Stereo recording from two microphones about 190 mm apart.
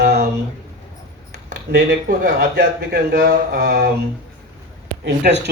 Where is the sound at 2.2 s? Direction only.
60° right (ahead or behind).